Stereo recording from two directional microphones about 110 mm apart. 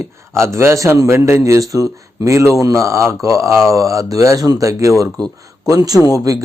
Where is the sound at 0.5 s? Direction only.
25° right (ahead or behind).